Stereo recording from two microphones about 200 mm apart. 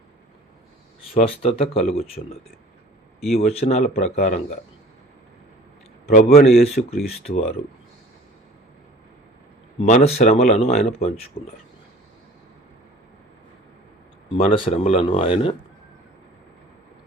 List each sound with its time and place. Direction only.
1.2 s speech: 30° left (ahead or behind)
6.1 s speech: 45° left (ahead or behind)
9.8 s speech: 35° left (ahead or behind)
11.4 s speech: 45° left (ahead or behind)
14.3 s speech: 30° left (ahead or behind)